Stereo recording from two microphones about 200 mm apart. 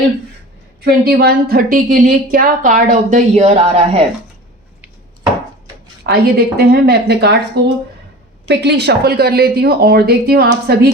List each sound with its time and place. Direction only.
0.9 s a woman's voice: 50° right (ahead or behind); by 4.0 s 30° right (ahead or behind)
6.0 s speech: 50° right (ahead or behind)
8.4 s speech: 55° right (ahead or behind)